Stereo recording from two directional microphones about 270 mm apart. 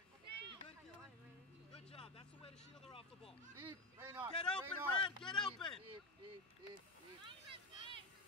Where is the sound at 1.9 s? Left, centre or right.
Left.